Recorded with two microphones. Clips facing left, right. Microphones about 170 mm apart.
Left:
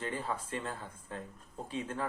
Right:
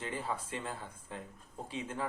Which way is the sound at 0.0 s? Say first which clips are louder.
Left 1 dB; 15° right (ahead or behind).